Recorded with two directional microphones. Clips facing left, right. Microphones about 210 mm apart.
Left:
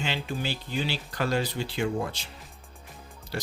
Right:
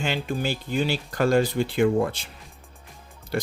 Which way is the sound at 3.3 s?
50° right (ahead or behind).